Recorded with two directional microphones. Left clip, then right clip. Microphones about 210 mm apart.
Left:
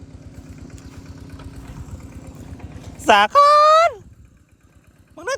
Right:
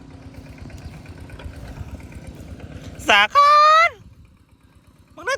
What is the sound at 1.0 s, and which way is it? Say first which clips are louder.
Vehicle: right 1 dB; 40° right (ahead or behind).